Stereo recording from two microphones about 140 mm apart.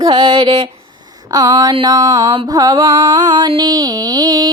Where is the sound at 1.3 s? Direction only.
25° right (ahead or behind).